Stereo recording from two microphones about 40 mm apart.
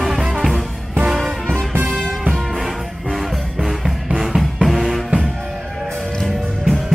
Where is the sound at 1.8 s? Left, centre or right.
Centre.